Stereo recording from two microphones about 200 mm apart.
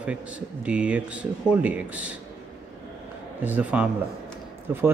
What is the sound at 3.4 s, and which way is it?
Speech, 5° right (ahead or behind).